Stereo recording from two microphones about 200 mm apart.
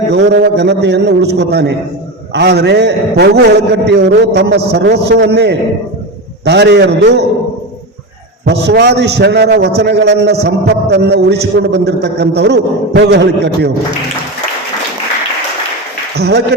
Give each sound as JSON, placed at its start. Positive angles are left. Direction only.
{"t": 0.1, "sound": "a man's voice", "side_deg": -55}
{"t": 8.4, "sound": "a man's voice", "side_deg": -55}
{"t": 16.1, "sound": "a man's voice", "side_deg": -55}